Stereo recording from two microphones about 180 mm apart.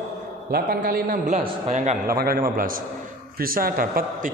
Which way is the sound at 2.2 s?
55° right (ahead or behind).